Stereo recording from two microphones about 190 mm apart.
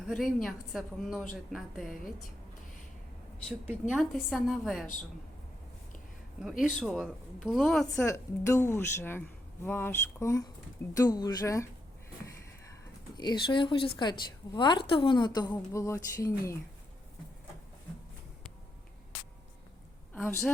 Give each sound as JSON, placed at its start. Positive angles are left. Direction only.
{"t": 0.0, "sound": "a woman's voice", "side_deg": 0}
{"t": 3.5, "sound": "a woman's voice", "side_deg": -5}
{"t": 6.4, "sound": "a woman's voice", "side_deg": 0}
{"t": 8.0, "sound": "speech", "side_deg": 15}
{"t": 13.1, "sound": "a woman's voice", "side_deg": 25}
{"t": 20.1, "sound": "speech", "side_deg": 5}